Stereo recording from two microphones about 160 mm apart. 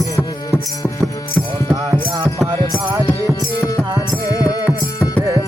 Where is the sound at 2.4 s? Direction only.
Centre (ahead or behind).